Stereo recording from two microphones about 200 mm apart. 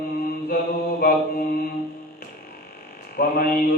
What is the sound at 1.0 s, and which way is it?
Mantra, 45° left (ahead or behind).